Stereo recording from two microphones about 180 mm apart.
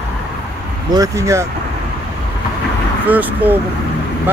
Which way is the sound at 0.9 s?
20° right (ahead or behind).